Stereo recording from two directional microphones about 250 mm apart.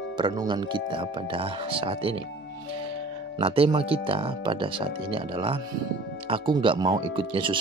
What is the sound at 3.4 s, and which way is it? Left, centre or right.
Speech, right.